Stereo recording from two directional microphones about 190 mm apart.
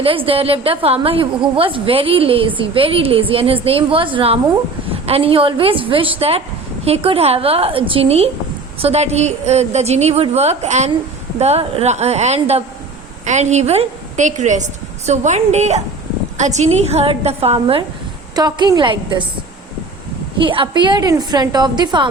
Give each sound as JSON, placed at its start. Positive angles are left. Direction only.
{"t": 0.0, "sound": "a woman's voice", "side_deg": -30}
{"t": 18.3, "sound": "a woman's voice", "side_deg": -20}
{"t": 20.4, "sound": "a woman's voice", "side_deg": -25}